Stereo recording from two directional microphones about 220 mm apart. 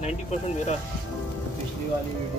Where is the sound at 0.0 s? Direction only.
30° left (ahead or behind).